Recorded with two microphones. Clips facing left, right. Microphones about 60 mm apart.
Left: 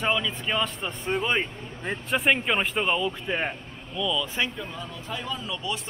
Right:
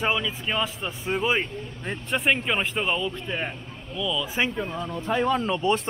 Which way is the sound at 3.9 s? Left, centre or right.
Centre.